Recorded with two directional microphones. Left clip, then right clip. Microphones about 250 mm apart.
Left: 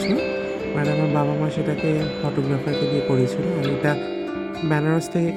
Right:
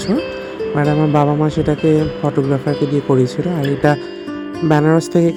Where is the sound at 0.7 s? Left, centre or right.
Centre.